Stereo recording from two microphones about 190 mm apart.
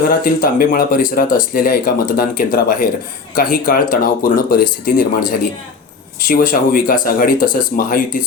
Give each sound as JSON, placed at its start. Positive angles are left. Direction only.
{"t": 0.1, "sound": "speech", "side_deg": 50}
{"t": 6.2, "sound": "speech", "side_deg": 45}